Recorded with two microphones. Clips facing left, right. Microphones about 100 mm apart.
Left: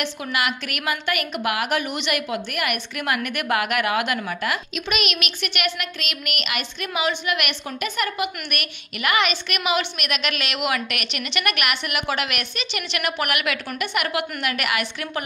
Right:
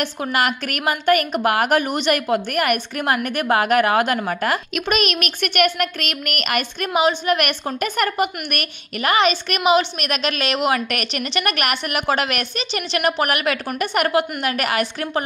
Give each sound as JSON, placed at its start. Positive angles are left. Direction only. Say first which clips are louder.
{"t": 0.0, "sound": "a woman's voice", "louder": "right 4 dB", "side_deg": -45}